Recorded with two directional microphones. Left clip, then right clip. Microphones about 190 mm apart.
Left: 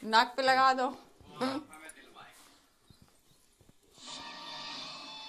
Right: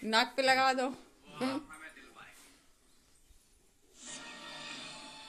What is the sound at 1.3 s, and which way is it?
Speech, 20° right (ahead or behind).